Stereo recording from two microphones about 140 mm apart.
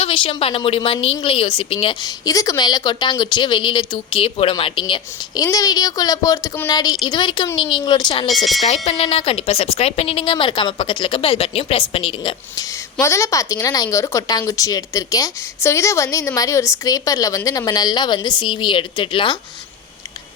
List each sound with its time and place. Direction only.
0.0 s a woman's voice: 40° left (ahead or behind)
2.0 s a woman's voice: 25° left (ahead or behind)
5.4 s a woman's voice: 25° left (ahead or behind)
8.6 s speech: 50° left (ahead or behind)
13.0 s speech: 20° left (ahead or behind)